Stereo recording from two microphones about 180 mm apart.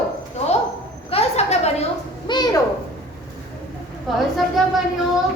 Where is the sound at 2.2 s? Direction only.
25° left (ahead or behind).